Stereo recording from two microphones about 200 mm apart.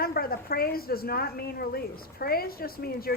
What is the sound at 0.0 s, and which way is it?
A woman's voice, 50° left (ahead or behind).